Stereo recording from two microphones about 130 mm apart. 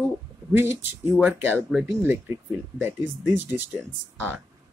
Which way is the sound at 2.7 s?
15° right (ahead or behind).